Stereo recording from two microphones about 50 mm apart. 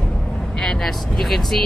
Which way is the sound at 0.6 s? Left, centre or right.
Centre.